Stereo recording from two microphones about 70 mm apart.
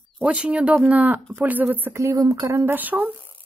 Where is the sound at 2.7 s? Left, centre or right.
Right.